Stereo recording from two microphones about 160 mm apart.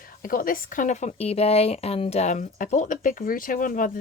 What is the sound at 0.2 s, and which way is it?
Speech, 60° left (ahead or behind).